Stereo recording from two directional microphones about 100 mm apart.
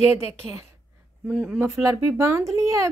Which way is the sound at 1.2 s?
15° right (ahead or behind).